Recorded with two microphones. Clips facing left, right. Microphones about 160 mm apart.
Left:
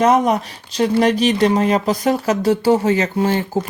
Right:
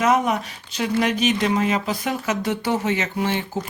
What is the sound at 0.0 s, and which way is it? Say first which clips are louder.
Speech: left 5 dB; 35° left (ahead or behind).